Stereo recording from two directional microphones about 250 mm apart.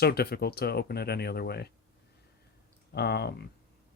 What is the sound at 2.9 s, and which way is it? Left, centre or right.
Speech, left.